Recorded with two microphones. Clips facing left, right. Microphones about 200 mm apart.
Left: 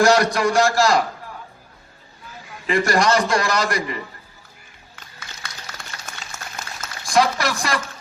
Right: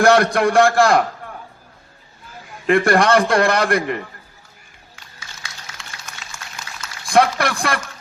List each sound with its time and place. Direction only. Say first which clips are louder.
0.0 s a man's voice: right 2 dB; 55° right (ahead or behind)
2.6 s a man's voice: right 4 dB; 55° right (ahead or behind)
4.9 s music: left 1 dB; 55° left (ahead or behind)
7.0 s speech: right 3 dB; 55° right (ahead or behind)